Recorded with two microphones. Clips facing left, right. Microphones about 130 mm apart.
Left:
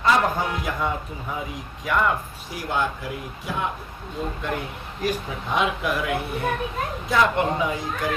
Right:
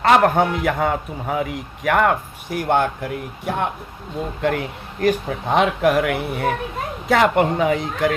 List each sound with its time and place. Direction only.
0.0 s speech: 65° right (ahead or behind)
4.4 s speech: 75° right (ahead or behind)